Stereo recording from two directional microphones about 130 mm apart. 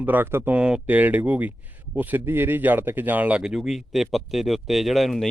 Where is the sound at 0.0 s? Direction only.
15° right (ahead or behind).